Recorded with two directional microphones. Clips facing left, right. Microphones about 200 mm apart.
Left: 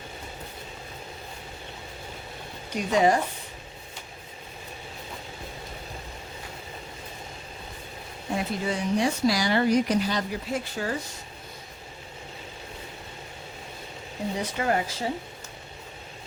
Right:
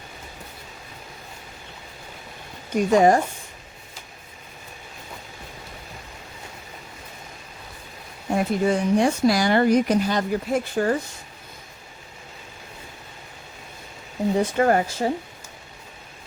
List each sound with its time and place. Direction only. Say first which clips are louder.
2.7 s speech: right 5 dB; 50° right (ahead or behind)
8.4 s speech: right 8 dB; 50° right (ahead or behind)
14.3 s speech: right 7 dB; 50° right (ahead or behind)